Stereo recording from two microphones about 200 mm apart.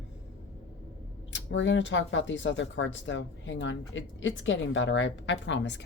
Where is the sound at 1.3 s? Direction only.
65° left (ahead or behind).